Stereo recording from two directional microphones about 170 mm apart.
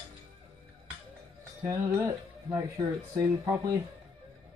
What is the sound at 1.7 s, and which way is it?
Speech, 20° right (ahead or behind).